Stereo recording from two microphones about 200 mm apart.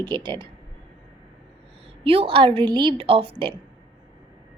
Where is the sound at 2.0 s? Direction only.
25° right (ahead or behind).